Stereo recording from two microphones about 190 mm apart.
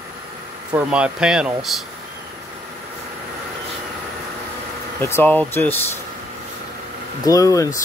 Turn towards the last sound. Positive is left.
turn(degrees=15)  # may be behind; listen again after turning